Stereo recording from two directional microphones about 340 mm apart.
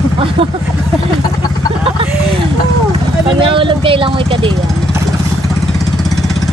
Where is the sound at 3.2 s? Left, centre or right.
Centre.